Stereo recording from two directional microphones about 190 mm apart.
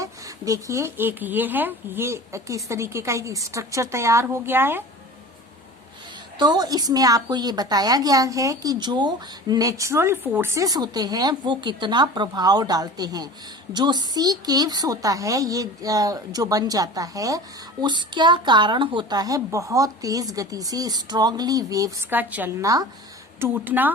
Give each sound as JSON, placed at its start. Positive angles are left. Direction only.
{"t": 0.0, "sound": "speech", "side_deg": -15}
{"t": 6.4, "sound": "a woman's voice", "side_deg": -20}